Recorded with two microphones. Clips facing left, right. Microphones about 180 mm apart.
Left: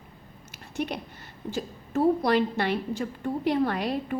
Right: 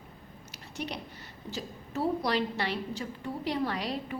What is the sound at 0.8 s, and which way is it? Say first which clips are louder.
A woman's voice: left 6 dB; 55° left (ahead or behind).